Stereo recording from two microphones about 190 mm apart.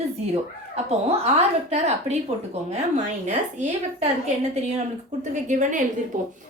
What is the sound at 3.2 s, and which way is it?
Speech, 40° right (ahead or behind).